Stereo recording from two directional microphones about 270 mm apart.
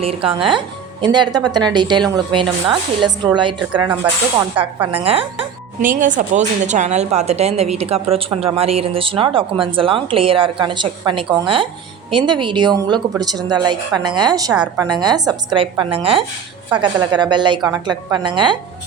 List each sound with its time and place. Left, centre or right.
0.0 s a woman's voice: right
4.4 s a woman's voice: centre
5.0 s a woman's voice: right